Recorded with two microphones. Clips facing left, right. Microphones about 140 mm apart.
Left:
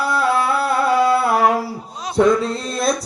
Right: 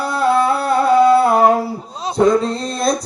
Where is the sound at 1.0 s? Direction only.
25° right (ahead or behind).